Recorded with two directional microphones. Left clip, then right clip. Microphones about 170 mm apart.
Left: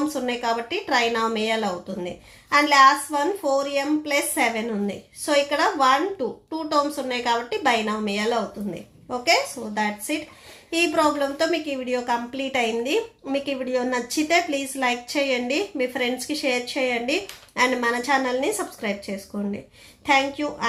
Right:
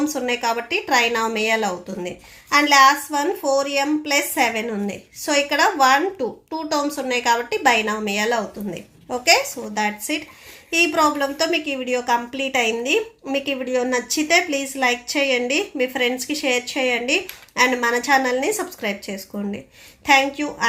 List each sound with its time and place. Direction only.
0.1 s a woman's voice: 25° right (ahead or behind)